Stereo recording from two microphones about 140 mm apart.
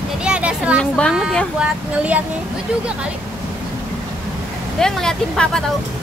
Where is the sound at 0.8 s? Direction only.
5° left (ahead or behind).